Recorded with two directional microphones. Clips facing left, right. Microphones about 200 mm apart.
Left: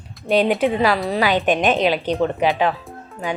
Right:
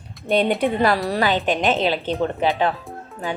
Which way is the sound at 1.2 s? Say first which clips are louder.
Left 3 dB; 15° left (ahead or behind).